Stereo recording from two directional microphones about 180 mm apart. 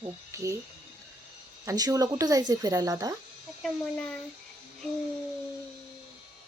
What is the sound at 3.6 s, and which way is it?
Speech, 5° left (ahead or behind).